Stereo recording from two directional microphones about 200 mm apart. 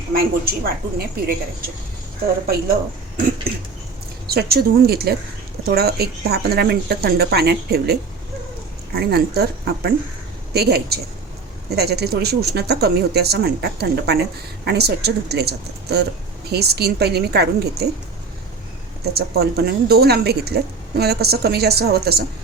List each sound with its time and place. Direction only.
0.1 s speech: 50° right (ahead or behind)
4.3 s speech: 50° right (ahead or behind)
9.0 s speech: 55° right (ahead or behind)
19.1 s speech: 55° right (ahead or behind)